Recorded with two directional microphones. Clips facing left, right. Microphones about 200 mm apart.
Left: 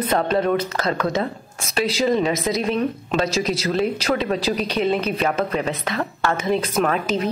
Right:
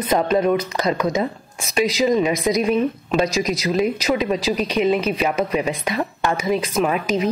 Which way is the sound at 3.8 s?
10° right (ahead or behind).